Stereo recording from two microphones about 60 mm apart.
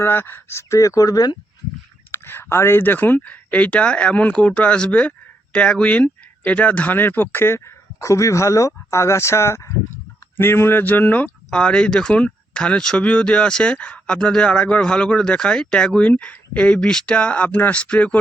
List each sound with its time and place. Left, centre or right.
0.0 s speech: left
0.7 s speech: left
2.1 s speech: left
10.3 s speech: left; by 18.2 s centre